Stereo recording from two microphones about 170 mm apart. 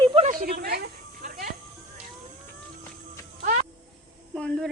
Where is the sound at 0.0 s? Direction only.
30° right (ahead or behind).